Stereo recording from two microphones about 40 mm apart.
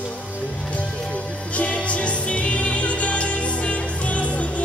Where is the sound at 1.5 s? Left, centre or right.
Left.